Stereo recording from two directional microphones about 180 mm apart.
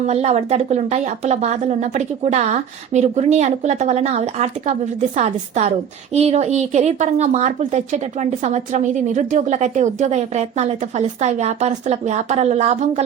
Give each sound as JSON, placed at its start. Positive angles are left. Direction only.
{"t": 0.1, "sound": "speech", "side_deg": -40}